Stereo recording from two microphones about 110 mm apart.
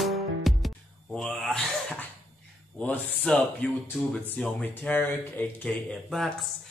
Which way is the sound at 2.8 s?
10° left (ahead or behind).